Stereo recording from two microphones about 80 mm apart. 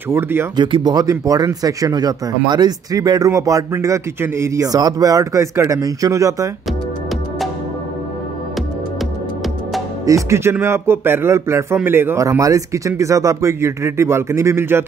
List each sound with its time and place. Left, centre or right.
0.1 s speech: right
0.6 s speech: right
1.2 s a man's voice: right
10.0 s speech: right
10.5 s a man's voice: right
12.2 s speech: right